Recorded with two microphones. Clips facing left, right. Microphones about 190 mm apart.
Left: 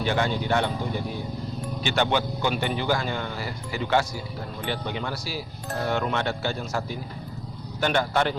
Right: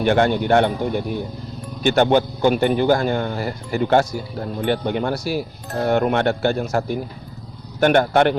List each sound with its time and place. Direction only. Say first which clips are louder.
0.0 s speech: right 8 dB; 60° right (ahead or behind)
1.8 s speech: right 9 dB; 50° right (ahead or behind)